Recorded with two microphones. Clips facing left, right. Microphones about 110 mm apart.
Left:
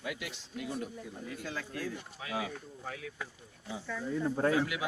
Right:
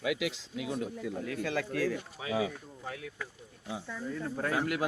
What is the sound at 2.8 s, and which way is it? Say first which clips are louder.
Speech: right 2 dB; centre (ahead or behind).